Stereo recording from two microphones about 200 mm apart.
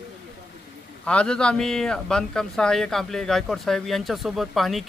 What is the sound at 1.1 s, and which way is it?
A man's voice, 5° left (ahead or behind).